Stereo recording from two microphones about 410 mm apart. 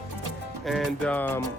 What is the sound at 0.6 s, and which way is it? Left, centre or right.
Music, centre.